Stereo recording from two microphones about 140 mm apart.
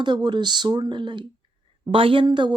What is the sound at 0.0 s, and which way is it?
Speech, 35° right (ahead or behind).